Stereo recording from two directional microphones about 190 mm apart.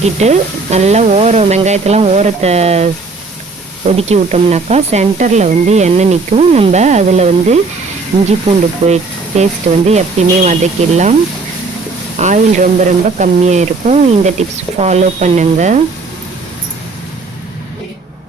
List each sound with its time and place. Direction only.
0.0 s speech: 35° right (ahead or behind)
8.8 s speech: 35° right (ahead or behind)
12.2 s speech: 40° right (ahead or behind)